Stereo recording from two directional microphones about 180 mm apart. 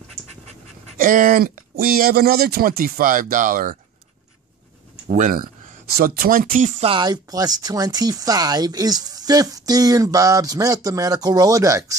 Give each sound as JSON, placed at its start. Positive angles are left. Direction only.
{"t": 0.9, "sound": "speech", "side_deg": -50}
{"t": 5.0, "sound": "speech", "side_deg": -45}
{"t": 6.8, "sound": "speech", "side_deg": -25}